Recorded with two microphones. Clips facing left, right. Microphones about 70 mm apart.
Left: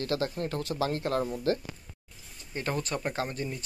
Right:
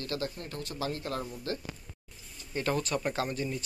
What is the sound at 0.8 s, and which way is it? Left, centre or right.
Speech, left.